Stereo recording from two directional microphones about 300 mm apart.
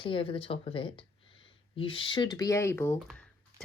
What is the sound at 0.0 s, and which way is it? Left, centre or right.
Speech, centre.